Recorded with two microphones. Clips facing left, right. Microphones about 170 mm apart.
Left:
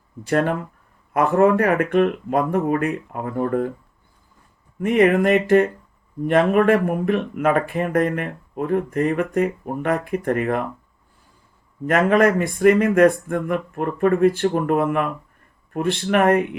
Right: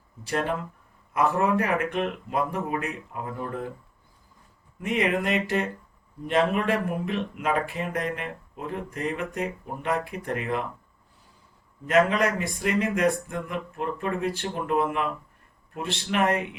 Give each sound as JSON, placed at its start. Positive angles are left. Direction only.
{"t": 0.3, "sound": "speech", "side_deg": 55}
{"t": 4.8, "sound": "speech", "side_deg": 55}
{"t": 11.9, "sound": "speech", "side_deg": 55}